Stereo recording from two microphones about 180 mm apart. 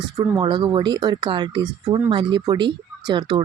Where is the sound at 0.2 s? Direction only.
25° right (ahead or behind).